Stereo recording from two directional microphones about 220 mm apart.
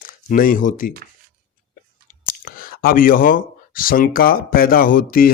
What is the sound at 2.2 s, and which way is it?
Speech, 40° left (ahead or behind).